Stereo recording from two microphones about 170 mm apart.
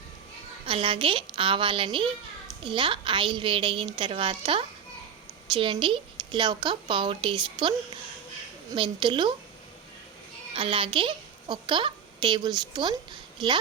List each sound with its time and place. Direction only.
0.6 s a woman's voice: 30° right (ahead or behind)
8.7 s a woman's voice: 30° right (ahead or behind)
10.5 s a woman's voice: 30° right (ahead or behind)